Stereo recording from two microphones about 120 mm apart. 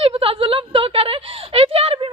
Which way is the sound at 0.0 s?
50° right (ahead or behind).